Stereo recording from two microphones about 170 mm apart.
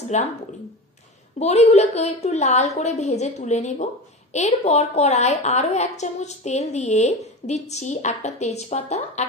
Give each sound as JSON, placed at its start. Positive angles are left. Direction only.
{"t": 0.1, "sound": "speech", "side_deg": 40}
{"t": 1.4, "sound": "a woman's voice", "side_deg": 40}